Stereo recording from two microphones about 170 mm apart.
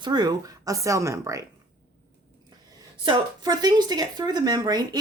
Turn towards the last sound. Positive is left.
turn(degrees=-25)  # may be behind; listen again after turning